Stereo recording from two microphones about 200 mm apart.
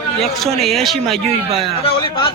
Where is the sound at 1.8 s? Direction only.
25° left (ahead or behind).